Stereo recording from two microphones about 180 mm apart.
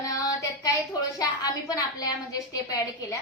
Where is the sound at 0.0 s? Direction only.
20° left (ahead or behind).